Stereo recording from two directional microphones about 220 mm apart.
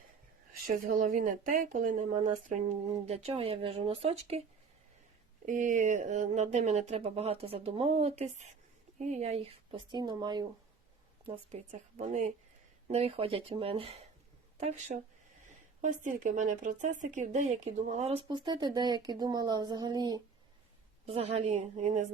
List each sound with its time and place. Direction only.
0.7 s speech: 40° right (ahead or behind)
5.5 s speech: 35° right (ahead or behind); by 10.4 s 20° right (ahead or behind)
11.3 s speech: 30° right (ahead or behind)
15.4 s speech: 35° right (ahead or behind); by 20.2 s 20° right (ahead or behind)
21.1 s speech: 30° right (ahead or behind)